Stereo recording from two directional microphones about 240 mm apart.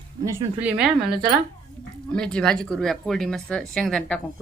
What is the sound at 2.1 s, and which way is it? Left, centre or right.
Speech, centre.